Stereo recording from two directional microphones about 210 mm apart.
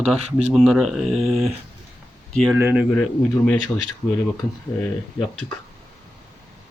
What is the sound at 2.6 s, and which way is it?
Speech, 10° right (ahead or behind).